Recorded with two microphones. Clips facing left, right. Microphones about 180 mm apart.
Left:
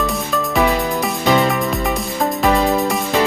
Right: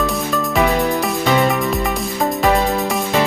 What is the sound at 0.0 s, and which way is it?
Music, centre (ahead or behind).